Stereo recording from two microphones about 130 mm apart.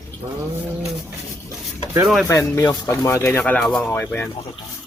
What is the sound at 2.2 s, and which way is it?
Speech, 25° left (ahead or behind).